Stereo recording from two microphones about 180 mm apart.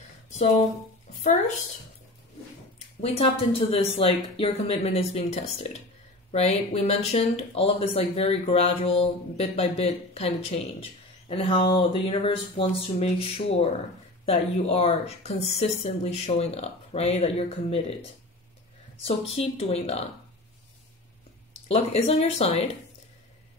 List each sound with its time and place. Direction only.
0.3 s speech: 35° left (ahead or behind)
1.1 s a sound: 45° left (ahead or behind)
3.0 s speech: 30° left (ahead or behind)
19.0 s speech: 35° left (ahead or behind)
21.6 s speech: 35° left (ahead or behind)